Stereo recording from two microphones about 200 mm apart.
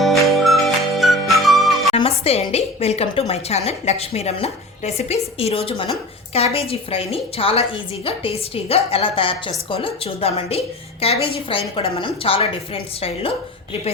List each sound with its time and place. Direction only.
0.0 s music: centre (ahead or behind)
2.0 s a woman's voice: 30° left (ahead or behind)